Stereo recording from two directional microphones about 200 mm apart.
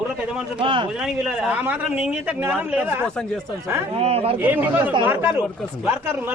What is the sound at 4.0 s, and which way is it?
Speech, 30° right (ahead or behind).